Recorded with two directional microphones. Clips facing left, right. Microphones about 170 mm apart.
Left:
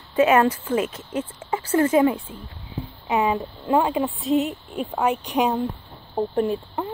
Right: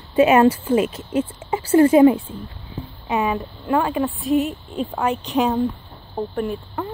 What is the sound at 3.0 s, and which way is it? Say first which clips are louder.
A woman's voice: even; 20° left (ahead or behind).